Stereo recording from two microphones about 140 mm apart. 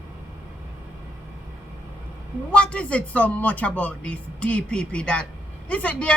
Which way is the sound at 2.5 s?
10° left (ahead or behind).